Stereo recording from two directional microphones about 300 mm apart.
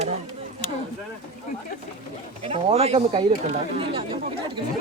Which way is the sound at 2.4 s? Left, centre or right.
Centre.